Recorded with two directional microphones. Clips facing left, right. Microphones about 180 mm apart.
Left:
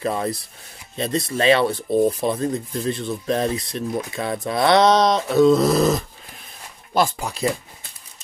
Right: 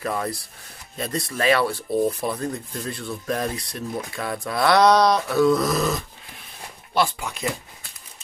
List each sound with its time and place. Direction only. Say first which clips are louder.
0.0 s speech: left 3 dB; 25° left (ahead or behind)